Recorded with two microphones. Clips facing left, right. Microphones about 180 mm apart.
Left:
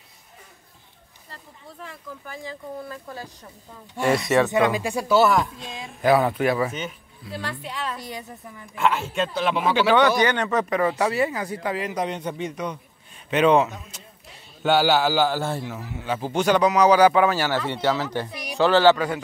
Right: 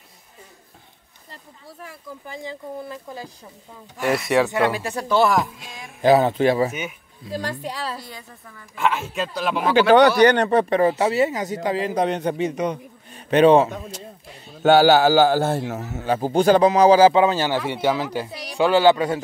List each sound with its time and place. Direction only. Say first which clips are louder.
1.3 s a sound: right 1 dB; 10° right (ahead or behind)
2.2 s speech: right 3 dB; 20° right (ahead or behind)
4.5 s speech: left 1 dB; 15° left (ahead or behind); by 5.7 s centre (ahead or behind)
6.0 s speech: right 3 dB; 25° right (ahead or behind)
6.7 s speech: right 1 dB; 10° right (ahead or behind)
7.2 s a man's voice: right 4 dB; 40° right (ahead or behind)
8.0 s a woman's voice: left 4 dB; 20° left (ahead or behind)
8.7 s speech: even; centre (ahead or behind)
9.9 s speech: right 5 dB; 40° right (ahead or behind)
12.1 s a man's voice: right 6 dB; 70° right (ahead or behind)
13.1 s a man's voice: right 4 dB; 35° right (ahead or behind)
14.6 s a man's voice: right 6 dB; 45° right (ahead or behind); by 18.9 s 10° right (ahead or behind)
18.9 s speech: right 3 dB; 25° right (ahead or behind)